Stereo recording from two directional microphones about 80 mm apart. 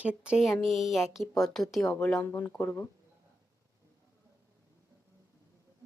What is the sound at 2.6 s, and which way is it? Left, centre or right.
Speech, left.